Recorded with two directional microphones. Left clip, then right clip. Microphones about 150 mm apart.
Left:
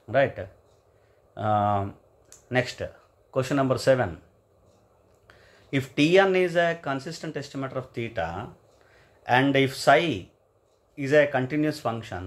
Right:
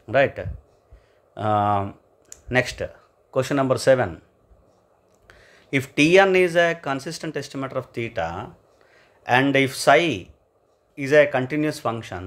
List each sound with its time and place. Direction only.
0.0 s speech: 35° right (ahead or behind)
5.2 s speech: 30° right (ahead or behind)